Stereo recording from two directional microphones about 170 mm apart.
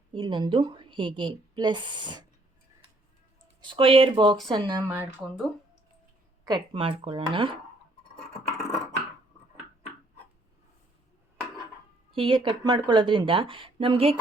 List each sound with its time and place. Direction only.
0.1 s a woman's voice: 25° right (ahead or behind)
3.6 s a woman's voice: 30° right (ahead or behind)
4.9 s speech: 10° right (ahead or behind)
6.4 s a woman's voice: 25° right (ahead or behind)
8.1 s a sound: 5° left (ahead or behind)
12.1 s a woman's voice: 30° right (ahead or behind)